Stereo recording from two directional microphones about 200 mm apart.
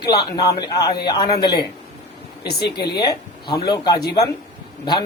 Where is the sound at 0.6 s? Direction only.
20° left (ahead or behind).